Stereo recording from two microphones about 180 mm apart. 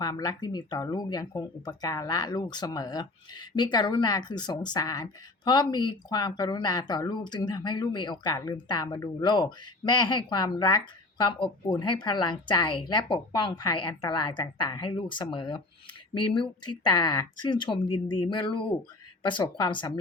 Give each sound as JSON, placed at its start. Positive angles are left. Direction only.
{"t": 0.0, "sound": "speech", "side_deg": 25}